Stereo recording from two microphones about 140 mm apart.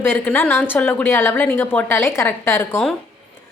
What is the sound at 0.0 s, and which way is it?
A woman's voice, 15° left (ahead or behind).